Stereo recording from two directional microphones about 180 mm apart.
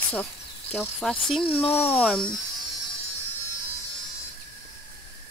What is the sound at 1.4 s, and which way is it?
Speech, 30° left (ahead or behind).